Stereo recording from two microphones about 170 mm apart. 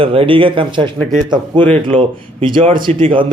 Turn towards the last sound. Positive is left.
turn(degrees=-30)  # may be behind; listen again after turning